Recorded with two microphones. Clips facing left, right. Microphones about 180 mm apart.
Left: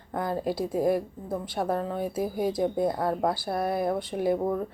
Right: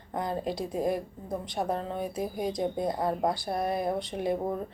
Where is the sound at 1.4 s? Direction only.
20° right (ahead or behind).